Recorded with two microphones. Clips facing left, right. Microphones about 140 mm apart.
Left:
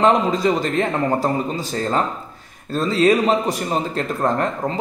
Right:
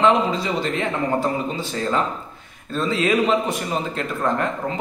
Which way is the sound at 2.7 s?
40° left (ahead or behind).